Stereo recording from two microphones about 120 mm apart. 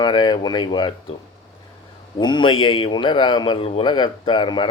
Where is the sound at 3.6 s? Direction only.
55° left (ahead or behind).